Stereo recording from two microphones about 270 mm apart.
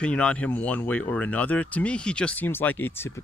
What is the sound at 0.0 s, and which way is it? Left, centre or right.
Speech, centre.